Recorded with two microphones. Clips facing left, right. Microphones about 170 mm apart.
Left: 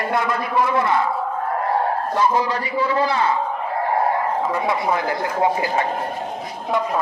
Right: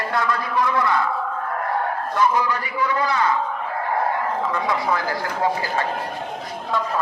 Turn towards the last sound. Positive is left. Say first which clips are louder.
# left 3 dB
turn(degrees=20)  # may be behind; listen again after turning